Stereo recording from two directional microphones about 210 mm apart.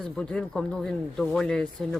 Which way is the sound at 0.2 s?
5° left (ahead or behind).